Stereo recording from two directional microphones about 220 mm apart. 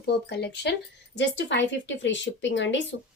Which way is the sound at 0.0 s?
50° left (ahead or behind).